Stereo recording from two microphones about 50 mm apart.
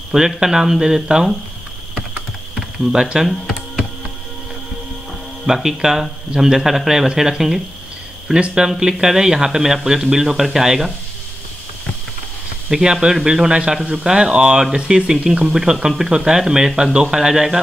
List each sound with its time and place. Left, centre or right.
0.1 s speech: centre
2.9 s speech: centre
5.5 s speech: centre
12.6 s speech: centre